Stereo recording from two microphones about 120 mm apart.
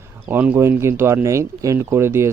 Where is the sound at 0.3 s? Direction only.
15° right (ahead or behind).